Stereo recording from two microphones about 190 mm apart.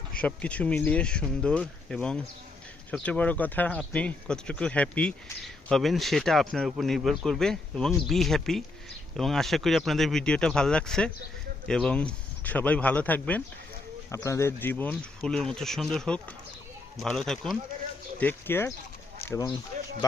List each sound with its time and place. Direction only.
0.2 s speech: 5° left (ahead or behind)